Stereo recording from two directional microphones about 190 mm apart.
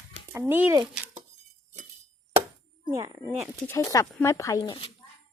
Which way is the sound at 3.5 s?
10° left (ahead or behind).